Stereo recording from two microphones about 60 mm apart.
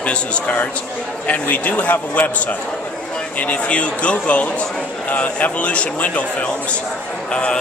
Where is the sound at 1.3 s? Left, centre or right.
Left.